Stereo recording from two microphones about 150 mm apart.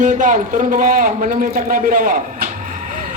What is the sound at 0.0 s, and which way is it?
A man's voice, 55° right (ahead or behind).